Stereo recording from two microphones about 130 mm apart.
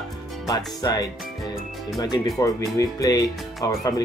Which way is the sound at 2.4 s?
25° left (ahead or behind).